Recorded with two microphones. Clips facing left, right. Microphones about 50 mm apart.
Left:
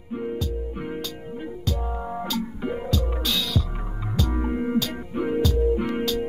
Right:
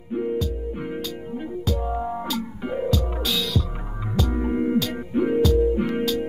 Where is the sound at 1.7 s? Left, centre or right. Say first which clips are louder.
Right 4 dB; centre.